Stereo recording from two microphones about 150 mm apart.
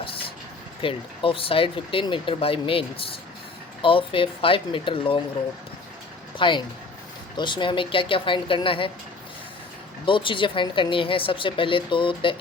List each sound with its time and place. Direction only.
0.0 s vehicle: 35° left (ahead or behind)
0.8 s speech: 35° left (ahead or behind)
6.3 s speech: 35° left (ahead or behind)
10.1 s speech: 35° left (ahead or behind)